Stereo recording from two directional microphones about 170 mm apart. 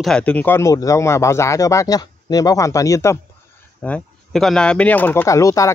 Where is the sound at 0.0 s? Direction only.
5° left (ahead or behind).